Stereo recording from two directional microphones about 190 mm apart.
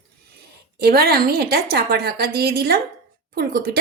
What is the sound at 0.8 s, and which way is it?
A woman's voice, 55° right (ahead or behind).